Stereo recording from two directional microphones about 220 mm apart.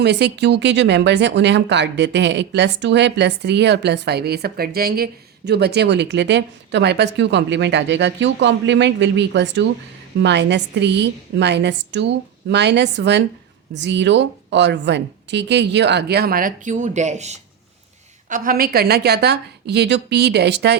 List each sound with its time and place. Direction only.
0.0 s speech: 50° right (ahead or behind)